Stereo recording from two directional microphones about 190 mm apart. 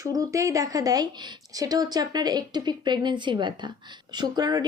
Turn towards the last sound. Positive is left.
turn(degrees=-20)  # may be behind; listen again after turning